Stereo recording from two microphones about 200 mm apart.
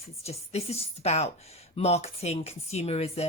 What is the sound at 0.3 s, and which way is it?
Speech, 30° left (ahead or behind).